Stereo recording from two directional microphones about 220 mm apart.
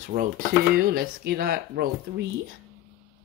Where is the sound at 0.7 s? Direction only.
45° right (ahead or behind).